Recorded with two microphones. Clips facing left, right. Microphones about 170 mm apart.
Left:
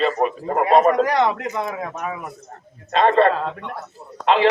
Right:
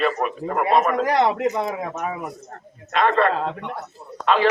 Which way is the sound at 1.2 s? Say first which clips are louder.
Right 3 dB; 25° right (ahead or behind).